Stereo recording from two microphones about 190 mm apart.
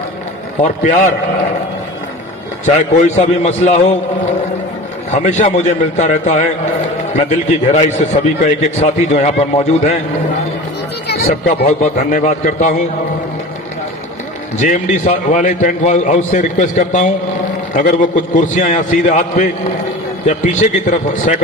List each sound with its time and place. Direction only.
0.6 s a man's voice: 45° left (ahead or behind)
2.6 s a man's voice: 40° left (ahead or behind)
5.1 s a man's voice: 35° left (ahead or behind)
11.3 s a man's voice: 40° left (ahead or behind)
14.6 s a man's voice: 40° left (ahead or behind)